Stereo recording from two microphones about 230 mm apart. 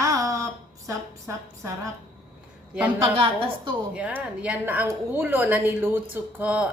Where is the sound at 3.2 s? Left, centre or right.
Right.